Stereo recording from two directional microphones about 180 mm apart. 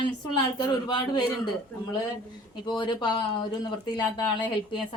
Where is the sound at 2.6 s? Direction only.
25° left (ahead or behind).